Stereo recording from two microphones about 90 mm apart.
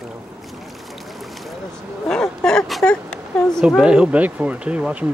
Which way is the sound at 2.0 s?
5° left (ahead or behind).